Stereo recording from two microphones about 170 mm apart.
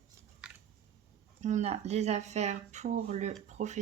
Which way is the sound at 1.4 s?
45° right (ahead or behind).